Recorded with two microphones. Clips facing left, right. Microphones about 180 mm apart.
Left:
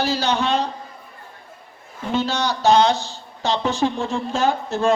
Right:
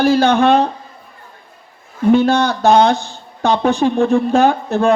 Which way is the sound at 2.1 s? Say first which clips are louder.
Right 5 dB; 55° right (ahead or behind).